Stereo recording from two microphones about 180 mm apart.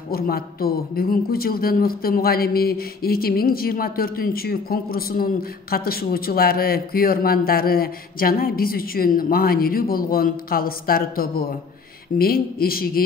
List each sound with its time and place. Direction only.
0.1 s speech: 55° left (ahead or behind)